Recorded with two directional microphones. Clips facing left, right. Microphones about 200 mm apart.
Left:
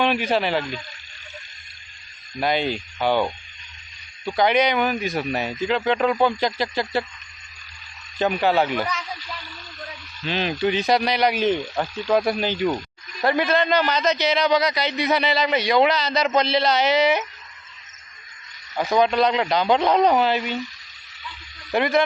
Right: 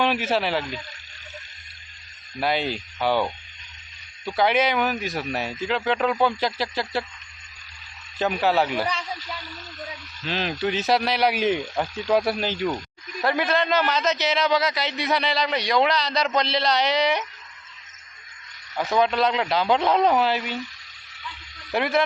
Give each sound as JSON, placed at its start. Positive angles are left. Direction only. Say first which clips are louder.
{"t": 0.0, "sound": "a man's voice", "louder": "left 2 dB", "side_deg": -5}
{"t": 2.4, "sound": "a man's voice", "louder": "left 2 dB", "side_deg": -5}
{"t": 4.4, "sound": "a man's voice", "louder": "left 2 dB", "side_deg": -5}
{"t": 8.2, "sound": "a man's voice", "louder": "left 2 dB", "side_deg": 0}
{"t": 10.2, "sound": "a man's voice", "louder": "left 3 dB", "side_deg": 0}
{"t": 18.8, "sound": "a man's voice", "louder": "left 2 dB", "side_deg": 0}
{"t": 21.7, "sound": "a man's voice", "louder": "left 3 dB", "side_deg": 0}